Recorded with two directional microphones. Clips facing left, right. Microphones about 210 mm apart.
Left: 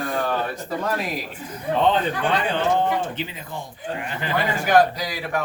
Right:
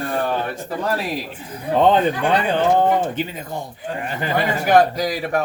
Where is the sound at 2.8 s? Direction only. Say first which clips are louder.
Right 5 dB; 45° right (ahead or behind).